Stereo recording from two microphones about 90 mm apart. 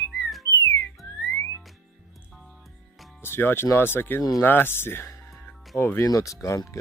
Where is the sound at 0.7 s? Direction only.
35° left (ahead or behind).